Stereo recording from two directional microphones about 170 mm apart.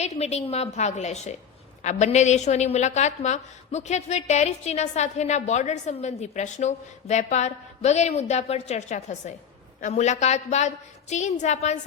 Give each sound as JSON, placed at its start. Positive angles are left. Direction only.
{"t": 0.0, "sound": "a woman's voice", "side_deg": 40}